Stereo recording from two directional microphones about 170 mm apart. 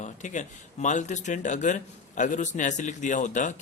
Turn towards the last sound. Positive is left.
turn(degrees=45)  # may be behind; listen again after turning